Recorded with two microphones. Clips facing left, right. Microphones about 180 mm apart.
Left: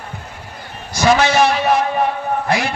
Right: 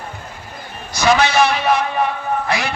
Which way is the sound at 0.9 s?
45° left (ahead or behind).